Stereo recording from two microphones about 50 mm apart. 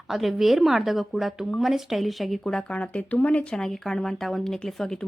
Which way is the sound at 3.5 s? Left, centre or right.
Centre.